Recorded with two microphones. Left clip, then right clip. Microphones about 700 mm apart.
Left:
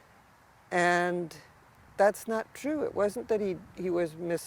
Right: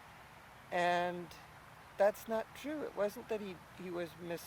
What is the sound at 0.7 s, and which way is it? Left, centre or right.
Speech, left.